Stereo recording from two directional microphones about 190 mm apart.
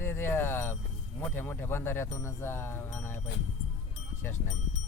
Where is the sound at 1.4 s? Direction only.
10° left (ahead or behind).